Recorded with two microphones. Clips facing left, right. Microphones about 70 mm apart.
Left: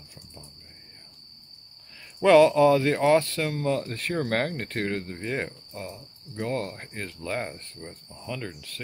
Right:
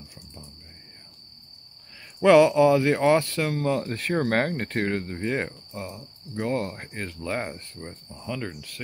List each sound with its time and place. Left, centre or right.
2.2 s cricket: centre